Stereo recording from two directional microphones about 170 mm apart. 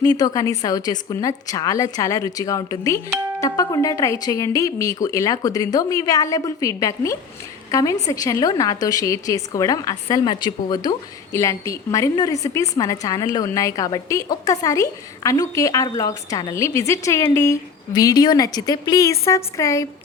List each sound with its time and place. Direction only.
0.0 s a woman's voice: 20° left (ahead or behind)